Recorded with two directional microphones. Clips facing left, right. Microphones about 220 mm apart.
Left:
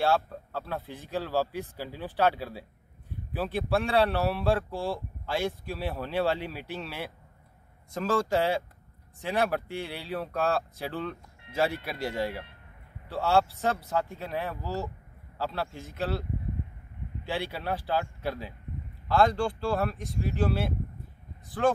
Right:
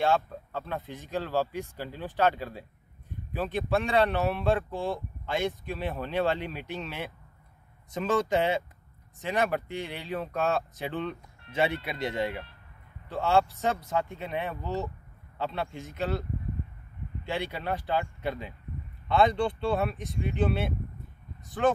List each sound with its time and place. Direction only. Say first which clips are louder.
0.0 s speech: even; 5° left (ahead or behind)
17.3 s speech: even; 5° left (ahead or behind)